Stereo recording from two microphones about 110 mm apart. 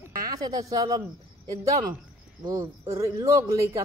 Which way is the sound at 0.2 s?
35° right (ahead or behind).